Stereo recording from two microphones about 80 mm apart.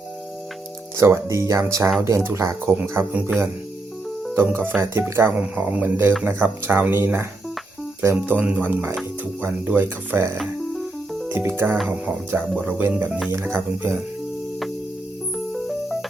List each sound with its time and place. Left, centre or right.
0.9 s speech: right
2.8 s speech: right
4.4 s speech: right
5.4 s speech: centre
10.4 s music: centre
11.3 s speech: right
15.5 s music: centre